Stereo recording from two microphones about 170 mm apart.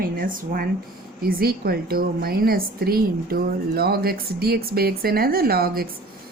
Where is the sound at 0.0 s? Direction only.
60° right (ahead or behind).